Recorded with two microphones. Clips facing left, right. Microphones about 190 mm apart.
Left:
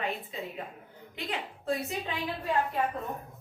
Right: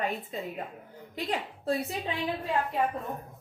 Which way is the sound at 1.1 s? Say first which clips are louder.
Right 4 dB; 35° right (ahead or behind).